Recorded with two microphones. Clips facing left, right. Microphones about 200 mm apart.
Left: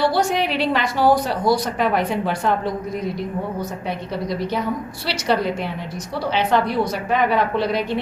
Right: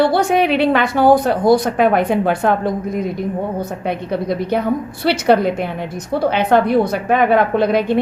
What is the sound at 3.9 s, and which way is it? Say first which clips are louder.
A woman's voice: right 7 dB; 55° right (ahead or behind).